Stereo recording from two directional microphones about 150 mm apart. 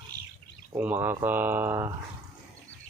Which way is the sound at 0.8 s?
10° right (ahead or behind).